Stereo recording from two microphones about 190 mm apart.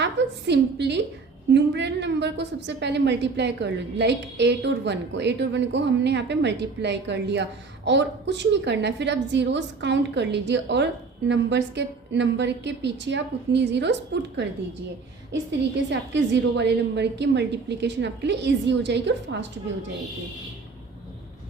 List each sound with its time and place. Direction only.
0.0 s a woman's voice: 65° right (ahead or behind)
15.9 s a woman's voice: 65° right (ahead or behind)